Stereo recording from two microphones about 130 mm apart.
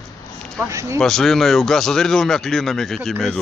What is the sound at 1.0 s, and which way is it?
Speech, centre (ahead or behind).